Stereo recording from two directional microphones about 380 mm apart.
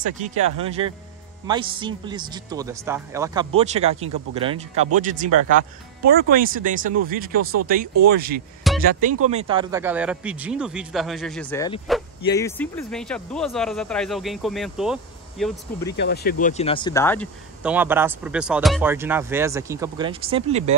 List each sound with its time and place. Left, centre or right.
0.2 s a man's voice: centre
8.6 s a sound: centre
9.3 s speech: centre
16.0 s speech: left; by 20.7 s centre